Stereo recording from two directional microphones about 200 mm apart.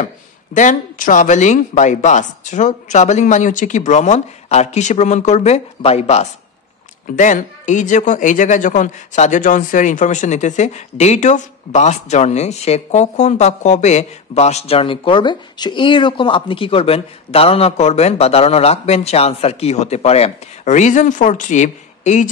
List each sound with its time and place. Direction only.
0.6 s speech: 40° left (ahead or behind)